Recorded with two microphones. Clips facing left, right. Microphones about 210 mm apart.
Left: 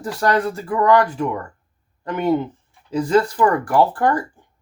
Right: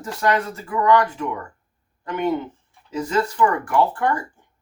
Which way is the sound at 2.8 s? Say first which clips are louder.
Left 5 dB; 35° left (ahead or behind).